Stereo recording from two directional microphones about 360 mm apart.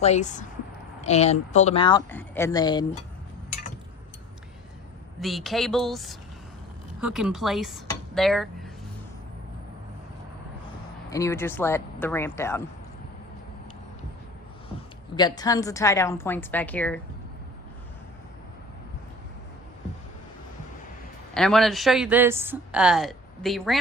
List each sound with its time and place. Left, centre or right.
0.0 s speech: centre
5.2 s speech: centre
11.1 s speech: centre
15.1 s speech: centre
21.3 s speech: centre